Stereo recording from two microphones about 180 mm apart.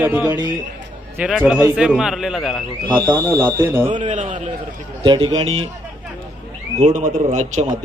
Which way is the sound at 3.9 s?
45° right (ahead or behind).